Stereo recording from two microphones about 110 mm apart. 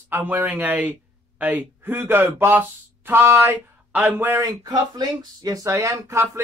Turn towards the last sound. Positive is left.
turn(degrees=-20)  # may be behind; listen again after turning